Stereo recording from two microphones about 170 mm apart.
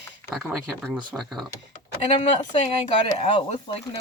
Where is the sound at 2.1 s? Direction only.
35° left (ahead or behind).